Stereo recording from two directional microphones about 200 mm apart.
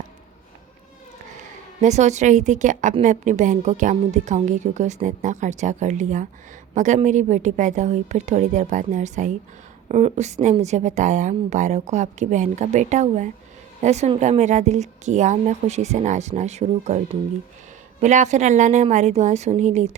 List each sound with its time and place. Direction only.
1.8 s a woman's voice: 35° right (ahead or behind)
18.0 s a woman's voice: 35° right (ahead or behind)